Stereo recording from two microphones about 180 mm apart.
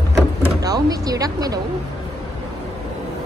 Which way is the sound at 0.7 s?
20° right (ahead or behind).